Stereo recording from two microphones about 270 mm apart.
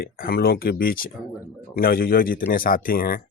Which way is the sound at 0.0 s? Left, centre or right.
Left.